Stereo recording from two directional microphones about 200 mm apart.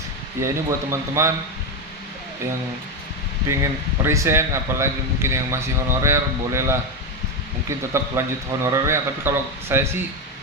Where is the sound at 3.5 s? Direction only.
15° right (ahead or behind).